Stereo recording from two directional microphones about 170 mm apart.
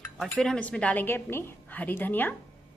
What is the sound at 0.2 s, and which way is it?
A woman's voice, 5° left (ahead or behind).